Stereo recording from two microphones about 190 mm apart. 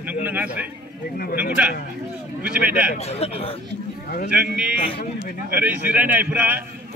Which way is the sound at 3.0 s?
35° left (ahead or behind).